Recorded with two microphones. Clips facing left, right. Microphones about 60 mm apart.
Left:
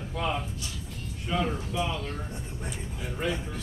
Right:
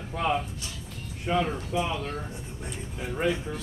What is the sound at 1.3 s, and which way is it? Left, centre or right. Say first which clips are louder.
Speech: right 3 dB; right.